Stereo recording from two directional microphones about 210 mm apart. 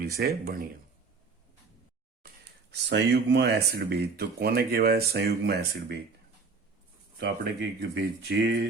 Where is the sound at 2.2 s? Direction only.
50° right (ahead or behind).